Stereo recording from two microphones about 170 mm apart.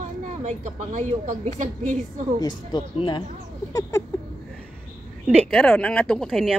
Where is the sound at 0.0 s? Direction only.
45° right (ahead or behind).